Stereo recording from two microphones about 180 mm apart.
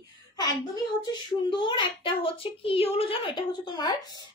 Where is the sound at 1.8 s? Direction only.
30° left (ahead or behind).